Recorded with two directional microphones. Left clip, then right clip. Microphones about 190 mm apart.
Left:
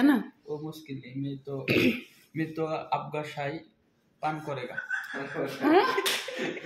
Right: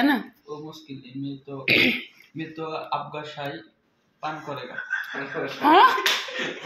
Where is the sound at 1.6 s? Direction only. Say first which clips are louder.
Right 6 dB; 55° left (ahead or behind).